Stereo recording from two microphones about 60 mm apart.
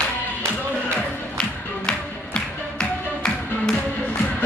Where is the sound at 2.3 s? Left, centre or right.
Centre.